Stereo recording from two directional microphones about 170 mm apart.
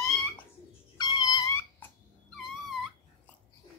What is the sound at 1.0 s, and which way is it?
Cat, 25° left (ahead or behind).